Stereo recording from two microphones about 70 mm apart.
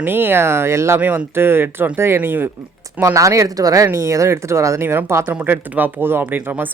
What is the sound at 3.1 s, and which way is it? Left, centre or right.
Speech, right.